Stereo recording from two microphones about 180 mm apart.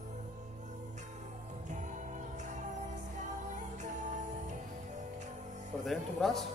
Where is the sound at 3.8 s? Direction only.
40° right (ahead or behind).